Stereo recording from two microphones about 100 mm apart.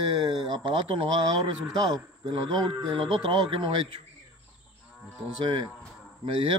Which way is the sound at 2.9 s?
60° right (ahead or behind).